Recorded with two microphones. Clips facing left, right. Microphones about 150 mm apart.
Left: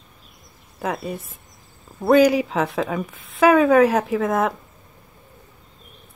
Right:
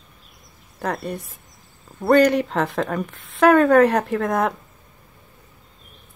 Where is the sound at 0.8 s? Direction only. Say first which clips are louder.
Even; centre (ahead or behind).